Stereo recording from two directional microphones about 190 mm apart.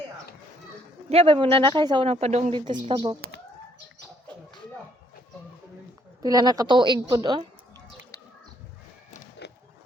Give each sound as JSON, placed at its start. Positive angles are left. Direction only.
{"t": 1.1, "sound": "speech", "side_deg": -30}
{"t": 6.2, "sound": "speech", "side_deg": -20}
{"t": 9.4, "sound": "a sound", "side_deg": 60}